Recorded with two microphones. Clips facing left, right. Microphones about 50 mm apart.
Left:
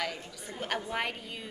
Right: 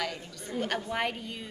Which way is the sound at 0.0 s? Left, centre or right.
Centre.